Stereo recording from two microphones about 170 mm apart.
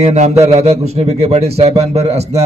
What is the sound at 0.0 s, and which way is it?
A man's voice, 40° right (ahead or behind).